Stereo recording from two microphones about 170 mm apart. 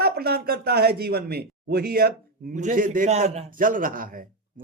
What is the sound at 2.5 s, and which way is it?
Speech, 50° right (ahead or behind).